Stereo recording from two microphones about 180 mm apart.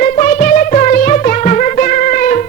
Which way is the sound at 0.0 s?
45° left (ahead or behind).